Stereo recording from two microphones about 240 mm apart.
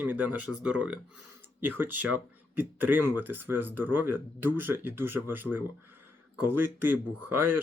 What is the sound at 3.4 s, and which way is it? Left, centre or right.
Speech, right.